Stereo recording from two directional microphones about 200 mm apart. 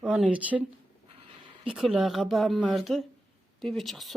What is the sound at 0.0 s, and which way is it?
Speech, 5° right (ahead or behind).